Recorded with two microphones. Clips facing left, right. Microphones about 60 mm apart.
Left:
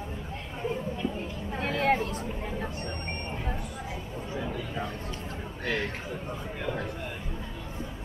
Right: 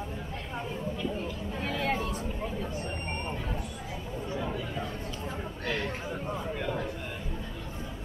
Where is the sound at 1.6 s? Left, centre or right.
Left.